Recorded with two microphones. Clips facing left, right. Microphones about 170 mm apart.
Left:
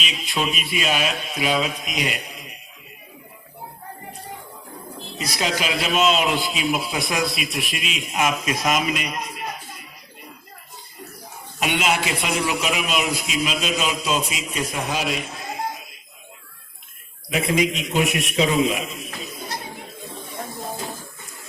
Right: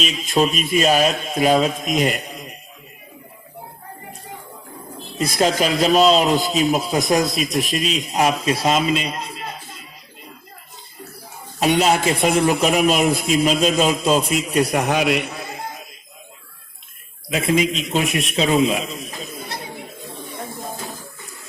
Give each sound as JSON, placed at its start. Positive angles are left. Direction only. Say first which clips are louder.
{"t": 0.0, "sound": "a man's voice", "louder": "right 7 dB", "side_deg": -45}
{"t": 5.1, "sound": "a man's voice", "louder": "right 7 dB", "side_deg": -50}
{"t": 11.6, "sound": "a man's voice", "louder": "right 6 dB", "side_deg": -40}
{"t": 14.8, "sound": "a sound", "louder": "right 7 dB", "side_deg": -65}
{"t": 17.5, "sound": "a man's voice", "louder": "right 3 dB", "side_deg": -30}